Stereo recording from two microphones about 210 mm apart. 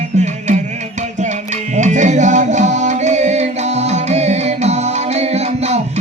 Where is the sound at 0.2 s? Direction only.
35° right (ahead or behind).